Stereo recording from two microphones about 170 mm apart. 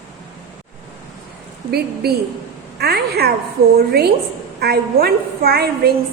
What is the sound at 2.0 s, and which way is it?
A woman's voice, 70° right (ahead or behind).